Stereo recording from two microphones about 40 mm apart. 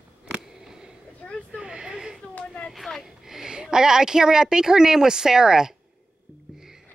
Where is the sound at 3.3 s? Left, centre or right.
Centre.